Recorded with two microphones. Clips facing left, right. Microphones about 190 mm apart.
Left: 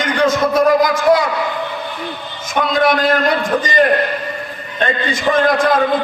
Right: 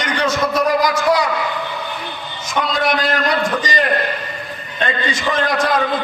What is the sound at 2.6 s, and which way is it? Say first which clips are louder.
A man's voice: left 4 dB; 50° left (ahead or behind).